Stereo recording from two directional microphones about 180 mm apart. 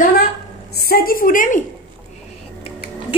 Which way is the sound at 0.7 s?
60° left (ahead or behind).